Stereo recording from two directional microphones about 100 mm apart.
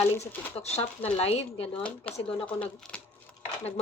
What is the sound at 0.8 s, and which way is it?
Speech, 15° left (ahead or behind).